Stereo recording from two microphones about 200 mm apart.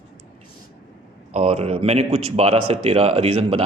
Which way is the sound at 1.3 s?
30° right (ahead or behind).